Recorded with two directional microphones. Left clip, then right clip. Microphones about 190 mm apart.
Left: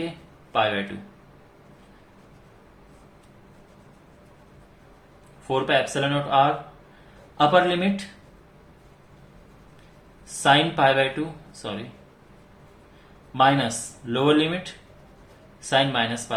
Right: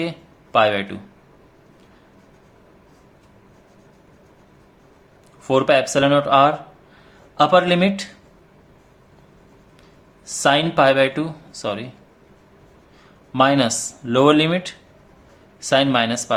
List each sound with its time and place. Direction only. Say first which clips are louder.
0.5 s speech: right 6 dB; 50° right (ahead or behind)
5.5 s speech: right 6 dB; 50° right (ahead or behind)
10.4 s speech: right 3 dB; 50° right (ahead or behind)
13.3 s speech: right 3 dB; 50° right (ahead or behind)
15.7 s speech: right 5 dB; 55° right (ahead or behind)